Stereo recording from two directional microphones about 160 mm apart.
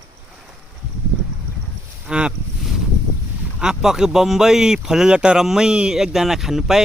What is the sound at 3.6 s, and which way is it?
Speech, 5° right (ahead or behind).